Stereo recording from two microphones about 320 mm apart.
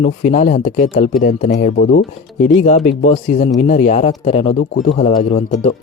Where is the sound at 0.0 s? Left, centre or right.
Left.